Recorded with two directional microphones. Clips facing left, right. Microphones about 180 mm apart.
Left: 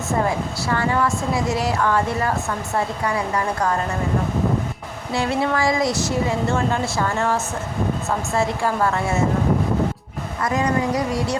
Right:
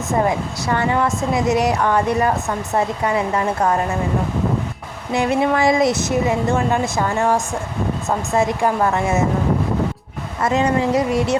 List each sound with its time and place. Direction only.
0.7 s a woman's voice: 20° right (ahead or behind)
5.1 s a woman's voice: 20° right (ahead or behind)
10.4 s a woman's voice: 25° right (ahead or behind)